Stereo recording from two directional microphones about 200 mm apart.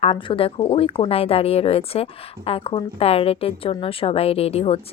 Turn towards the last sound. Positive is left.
turn(degrees=30)  # may be behind; listen again after turning